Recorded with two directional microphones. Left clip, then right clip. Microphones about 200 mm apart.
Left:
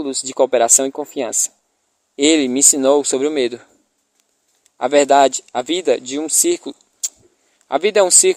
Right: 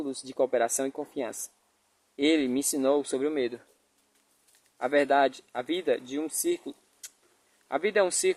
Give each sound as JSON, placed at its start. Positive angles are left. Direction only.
{"t": 0.0, "sound": "speech", "side_deg": 35}
{"t": 4.8, "sound": "speech", "side_deg": 40}